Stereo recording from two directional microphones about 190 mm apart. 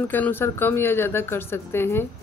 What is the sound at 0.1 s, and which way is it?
Speech, 10° left (ahead or behind).